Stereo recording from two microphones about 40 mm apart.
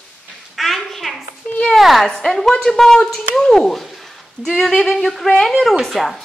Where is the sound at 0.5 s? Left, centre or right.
Centre.